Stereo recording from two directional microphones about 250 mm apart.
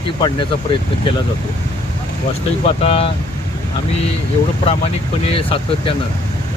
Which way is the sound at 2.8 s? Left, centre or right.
Left.